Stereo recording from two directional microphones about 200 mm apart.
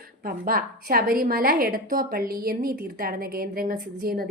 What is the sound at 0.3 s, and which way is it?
A woman's voice, 45° right (ahead or behind).